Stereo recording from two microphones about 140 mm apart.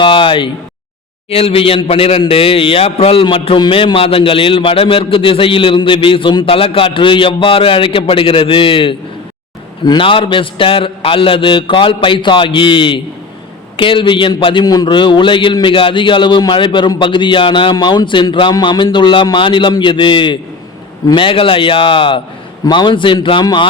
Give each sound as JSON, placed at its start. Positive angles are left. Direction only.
{"t": 0.0, "sound": "a man's voice", "side_deg": 35}